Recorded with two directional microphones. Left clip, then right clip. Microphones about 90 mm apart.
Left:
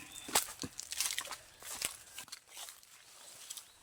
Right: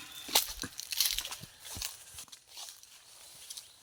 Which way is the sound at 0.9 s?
25° left (ahead or behind).